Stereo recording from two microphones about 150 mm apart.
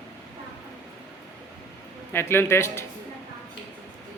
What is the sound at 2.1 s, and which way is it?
Speech, 15° left (ahead or behind).